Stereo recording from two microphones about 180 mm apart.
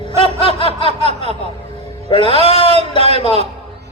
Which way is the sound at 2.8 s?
35° right (ahead or behind).